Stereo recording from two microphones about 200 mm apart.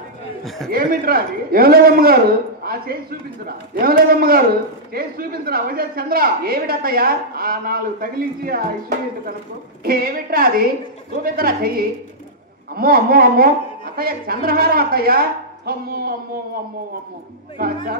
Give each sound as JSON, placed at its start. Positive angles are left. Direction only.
{"t": 0.4, "sound": "a man's voice", "side_deg": 0}
{"t": 0.7, "sound": "a woman's voice", "side_deg": -45}
{"t": 17.6, "sound": "a woman's voice", "side_deg": -50}